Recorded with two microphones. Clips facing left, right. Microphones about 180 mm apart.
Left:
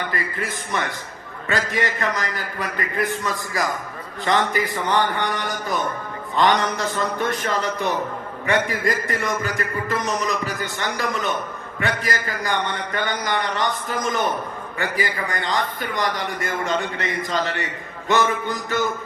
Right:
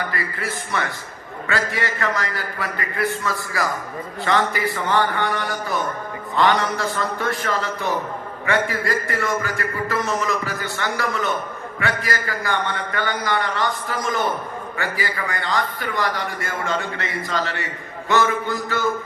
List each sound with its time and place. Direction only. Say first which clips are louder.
0.1 s a man's voice: even; 20° left (ahead or behind)